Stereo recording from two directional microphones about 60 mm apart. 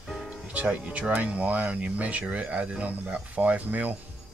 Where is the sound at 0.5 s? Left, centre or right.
Right.